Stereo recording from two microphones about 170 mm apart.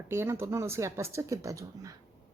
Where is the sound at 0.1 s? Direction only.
15° right (ahead or behind).